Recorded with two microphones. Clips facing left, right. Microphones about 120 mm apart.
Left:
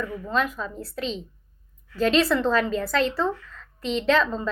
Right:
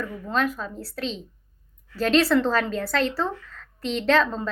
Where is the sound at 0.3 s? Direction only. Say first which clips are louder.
Right 1 dB; 40° right (ahead or behind).